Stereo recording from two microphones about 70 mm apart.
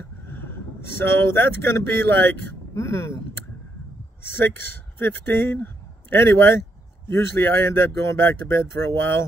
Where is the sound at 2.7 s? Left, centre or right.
Left.